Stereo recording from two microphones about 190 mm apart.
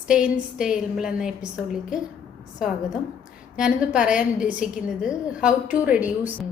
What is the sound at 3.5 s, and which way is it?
A woman's voice, 5° right (ahead or behind).